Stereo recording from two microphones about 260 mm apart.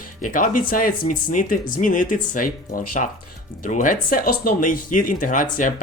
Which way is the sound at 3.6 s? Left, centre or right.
Left.